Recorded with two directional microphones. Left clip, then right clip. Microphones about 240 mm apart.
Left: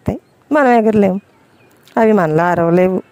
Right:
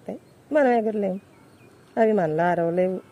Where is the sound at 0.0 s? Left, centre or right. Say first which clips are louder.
Left 12 dB; left.